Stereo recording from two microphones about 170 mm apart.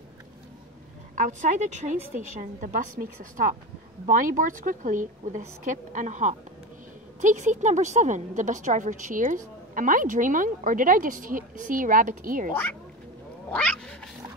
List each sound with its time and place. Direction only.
1.1 s a woman's voice: 50° right (ahead or behind)
13.5 s cat: 5° left (ahead or behind)